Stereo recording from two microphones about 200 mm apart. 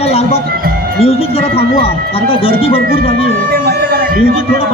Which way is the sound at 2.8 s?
50° right (ahead or behind).